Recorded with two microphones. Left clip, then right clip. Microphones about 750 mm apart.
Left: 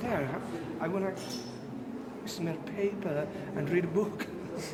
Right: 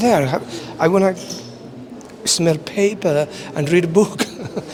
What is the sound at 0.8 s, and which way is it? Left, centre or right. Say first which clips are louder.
Speech: right 19 dB; right.